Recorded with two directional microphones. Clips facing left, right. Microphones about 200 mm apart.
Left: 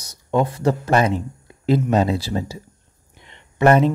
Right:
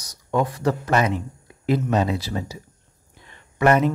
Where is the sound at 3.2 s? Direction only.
20° left (ahead or behind).